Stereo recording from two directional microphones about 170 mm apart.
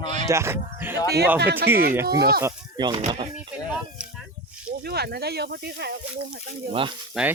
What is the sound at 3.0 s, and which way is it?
Speech, 40° right (ahead or behind).